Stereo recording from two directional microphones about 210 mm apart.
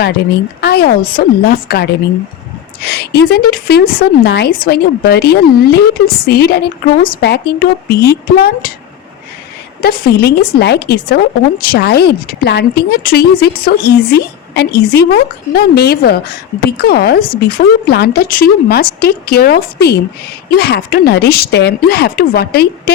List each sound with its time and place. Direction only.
0.6 s speech: 50° left (ahead or behind)
9.8 s speech: 45° left (ahead or behind)